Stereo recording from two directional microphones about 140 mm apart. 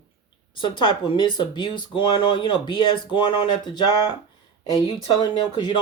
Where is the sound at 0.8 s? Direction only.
35° left (ahead or behind).